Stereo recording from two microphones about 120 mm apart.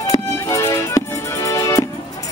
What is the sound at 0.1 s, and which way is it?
Music, 25° left (ahead or behind).